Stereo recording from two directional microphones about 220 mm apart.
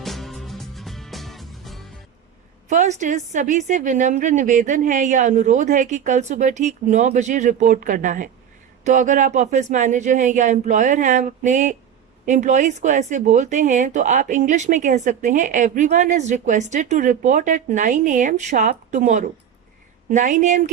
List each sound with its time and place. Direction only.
0.0 s music: centre (ahead or behind)
2.6 s speech: 35° right (ahead or behind)